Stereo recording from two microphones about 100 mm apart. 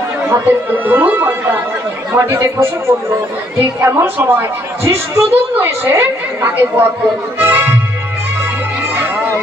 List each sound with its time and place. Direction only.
0.3 s a woman's voice: 20° right (ahead or behind)
7.4 s music: 20° right (ahead or behind)
8.9 s music: 20° right (ahead or behind)